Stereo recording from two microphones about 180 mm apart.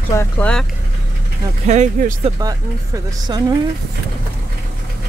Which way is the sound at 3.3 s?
25° right (ahead or behind).